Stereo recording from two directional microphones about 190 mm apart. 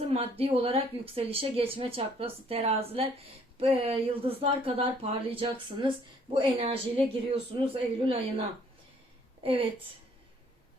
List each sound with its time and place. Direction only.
0.1 s a woman's voice: 30° right (ahead or behind)